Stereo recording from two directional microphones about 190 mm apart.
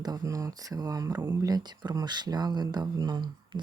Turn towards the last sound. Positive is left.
turn(degrees=-25)  # may be behind; listen again after turning